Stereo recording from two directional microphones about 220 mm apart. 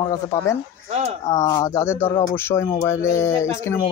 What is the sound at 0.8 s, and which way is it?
Speech, 30° right (ahead or behind).